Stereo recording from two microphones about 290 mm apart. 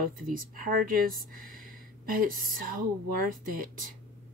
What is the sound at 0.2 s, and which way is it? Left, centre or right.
Speech, right.